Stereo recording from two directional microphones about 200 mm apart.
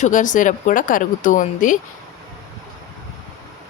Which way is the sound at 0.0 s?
40° left (ahead or behind).